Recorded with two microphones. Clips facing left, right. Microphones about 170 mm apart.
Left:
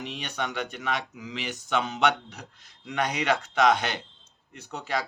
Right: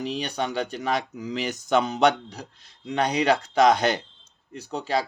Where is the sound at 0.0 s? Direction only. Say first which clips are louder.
Right 5 dB; 35° right (ahead or behind).